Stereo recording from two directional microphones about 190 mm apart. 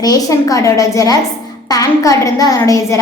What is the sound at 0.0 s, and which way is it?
A woman's voice, 20° left (ahead or behind).